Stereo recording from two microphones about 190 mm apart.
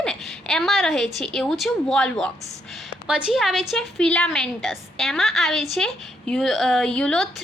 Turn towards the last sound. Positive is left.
turn(degrees=5)  # may be behind; listen again after turning